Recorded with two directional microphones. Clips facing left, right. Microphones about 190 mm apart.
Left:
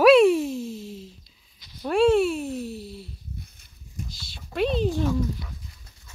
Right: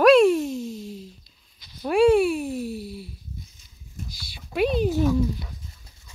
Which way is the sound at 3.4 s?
60° left (ahead or behind).